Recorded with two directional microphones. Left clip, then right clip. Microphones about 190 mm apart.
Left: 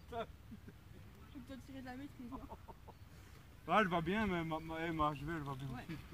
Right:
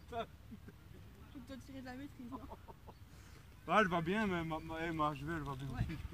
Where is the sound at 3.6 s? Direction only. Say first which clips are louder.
Right 1 dB; 15° right (ahead or behind).